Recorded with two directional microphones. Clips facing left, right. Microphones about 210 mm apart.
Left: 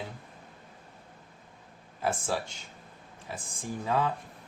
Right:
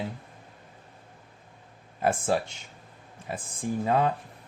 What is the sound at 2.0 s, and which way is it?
Speech, 55° right (ahead or behind).